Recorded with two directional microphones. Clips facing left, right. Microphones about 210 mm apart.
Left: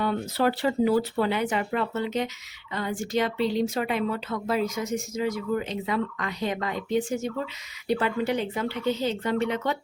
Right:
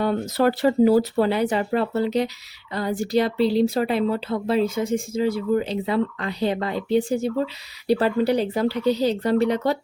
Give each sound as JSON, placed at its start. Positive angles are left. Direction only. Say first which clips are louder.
{"t": 0.0, "sound": "speech", "louder": "right 4 dB", "side_deg": -40}